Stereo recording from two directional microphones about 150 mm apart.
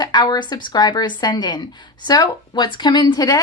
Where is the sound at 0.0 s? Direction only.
30° left (ahead or behind).